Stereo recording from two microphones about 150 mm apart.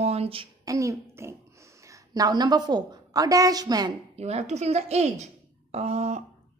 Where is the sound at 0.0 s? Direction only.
45° right (ahead or behind).